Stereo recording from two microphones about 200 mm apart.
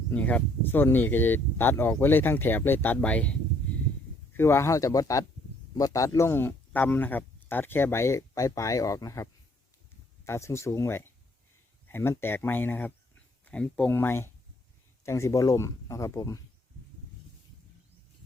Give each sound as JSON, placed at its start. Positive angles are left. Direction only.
{"t": 0.1, "sound": "speech", "side_deg": 5}
{"t": 4.4, "sound": "speech", "side_deg": 15}